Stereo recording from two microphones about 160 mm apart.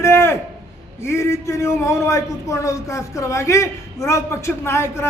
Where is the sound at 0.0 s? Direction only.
15° left (ahead or behind).